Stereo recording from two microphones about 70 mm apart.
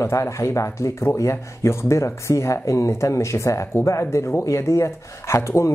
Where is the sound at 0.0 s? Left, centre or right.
Left.